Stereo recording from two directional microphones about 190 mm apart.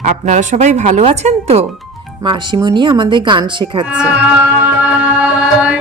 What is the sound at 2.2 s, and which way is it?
Speech, 25° right (ahead or behind).